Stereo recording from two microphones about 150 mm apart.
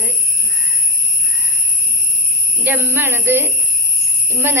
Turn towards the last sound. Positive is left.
turn(degrees=-15)  # may be behind; listen again after turning